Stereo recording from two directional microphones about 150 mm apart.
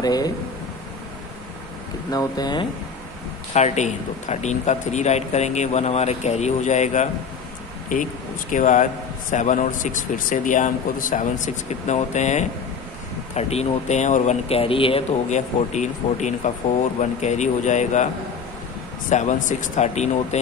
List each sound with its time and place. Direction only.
0.0 s speech: 25° left (ahead or behind)
2.0 s speech: 25° left (ahead or behind)
3.5 s a man's voice: 50° left (ahead or behind)
15.2 s a man's voice: 50° left (ahead or behind)